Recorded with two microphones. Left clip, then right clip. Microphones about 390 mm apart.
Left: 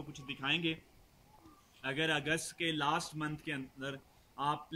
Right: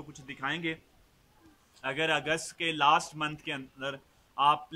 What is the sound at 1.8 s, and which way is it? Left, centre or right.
A man's voice, centre.